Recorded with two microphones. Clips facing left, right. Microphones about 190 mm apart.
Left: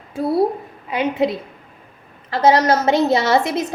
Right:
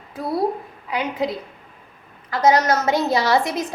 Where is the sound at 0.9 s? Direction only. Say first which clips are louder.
Left 5 dB; 25° left (ahead or behind).